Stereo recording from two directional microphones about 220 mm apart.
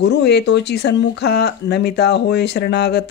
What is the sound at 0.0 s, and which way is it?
Speech, 50° left (ahead or behind).